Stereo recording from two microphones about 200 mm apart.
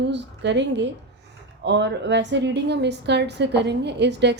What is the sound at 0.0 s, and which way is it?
A woman's voice, 60° right (ahead or behind).